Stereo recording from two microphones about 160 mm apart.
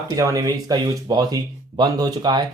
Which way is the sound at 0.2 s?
20° right (ahead or behind).